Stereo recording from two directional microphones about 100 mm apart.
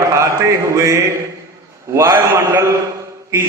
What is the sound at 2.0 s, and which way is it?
Speech, 25° right (ahead or behind).